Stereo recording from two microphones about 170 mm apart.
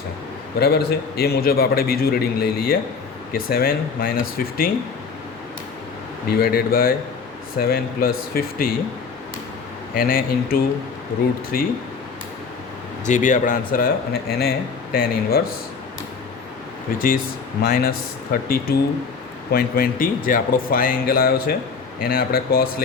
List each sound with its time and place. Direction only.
0.6 s a man's voice: 70° left (ahead or behind)
6.2 s a man's voice: 60° left (ahead or behind)
9.9 s a man's voice: 55° left (ahead or behind)
13.1 s a man's voice: 50° left (ahead or behind)
16.9 s a man's voice: 60° left (ahead or behind)